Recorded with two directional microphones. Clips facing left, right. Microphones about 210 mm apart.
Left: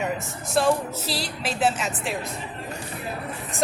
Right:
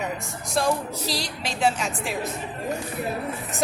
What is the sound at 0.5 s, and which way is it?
A woman's voice, 5° left (ahead or behind).